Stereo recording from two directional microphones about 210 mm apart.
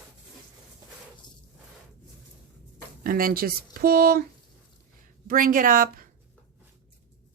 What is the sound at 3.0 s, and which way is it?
Speech, 45° right (ahead or behind).